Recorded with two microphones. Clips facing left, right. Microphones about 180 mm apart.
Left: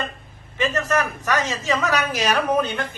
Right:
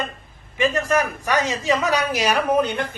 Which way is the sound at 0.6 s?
10° right (ahead or behind).